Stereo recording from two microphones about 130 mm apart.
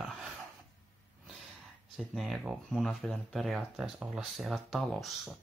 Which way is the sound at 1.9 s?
Centre (ahead or behind).